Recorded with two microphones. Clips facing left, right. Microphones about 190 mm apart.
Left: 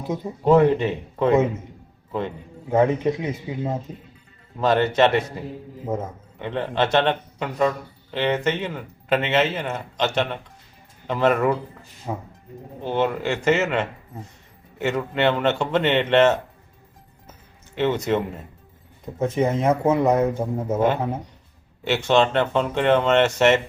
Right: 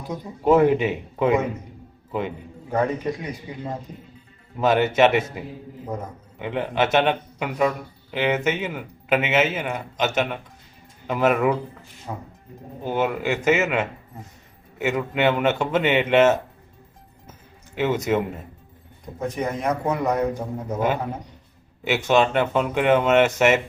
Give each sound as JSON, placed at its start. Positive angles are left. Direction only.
{"t": 0.1, "sound": "speech", "side_deg": 25}
{"t": 0.4, "sound": "speech", "side_deg": -5}
{"t": 2.6, "sound": "speech", "side_deg": 25}
{"t": 4.6, "sound": "speech", "side_deg": -5}
{"t": 5.8, "sound": "speech", "side_deg": 25}
{"t": 6.4, "sound": "speech", "side_deg": -10}
{"t": 12.8, "sound": "speech", "side_deg": -5}
{"t": 17.7, "sound": "speech", "side_deg": -5}
{"t": 19.2, "sound": "speech", "side_deg": 25}
{"t": 20.7, "sound": "speech", "side_deg": -10}